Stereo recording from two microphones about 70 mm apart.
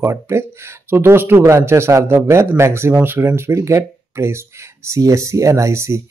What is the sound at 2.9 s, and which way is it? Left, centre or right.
Speech, right.